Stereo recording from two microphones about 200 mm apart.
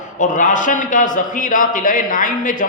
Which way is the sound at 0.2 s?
40° left (ahead or behind).